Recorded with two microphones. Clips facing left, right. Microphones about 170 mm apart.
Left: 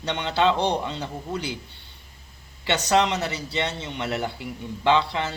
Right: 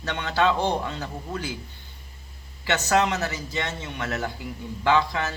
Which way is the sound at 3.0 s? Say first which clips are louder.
Left 1 dB; 25° left (ahead or behind).